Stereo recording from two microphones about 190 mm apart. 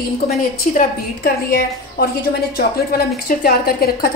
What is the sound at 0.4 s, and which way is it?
A woman's voice, 50° left (ahead or behind).